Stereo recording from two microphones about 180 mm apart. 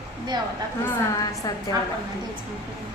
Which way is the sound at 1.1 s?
20° left (ahead or behind).